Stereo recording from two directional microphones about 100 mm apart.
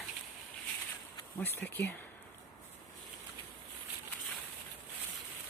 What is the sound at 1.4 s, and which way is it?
Speech, 20° left (ahead or behind).